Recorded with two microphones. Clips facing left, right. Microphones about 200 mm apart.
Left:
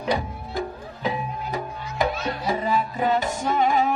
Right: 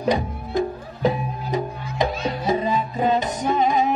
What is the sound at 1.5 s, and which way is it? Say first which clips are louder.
Music: right 5 dB; 20° right (ahead or behind).